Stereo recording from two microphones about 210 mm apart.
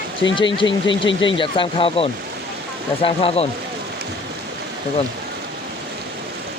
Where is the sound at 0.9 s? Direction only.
60° left (ahead or behind).